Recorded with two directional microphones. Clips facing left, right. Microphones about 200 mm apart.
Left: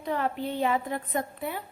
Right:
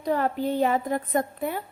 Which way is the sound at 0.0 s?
40° right (ahead or behind).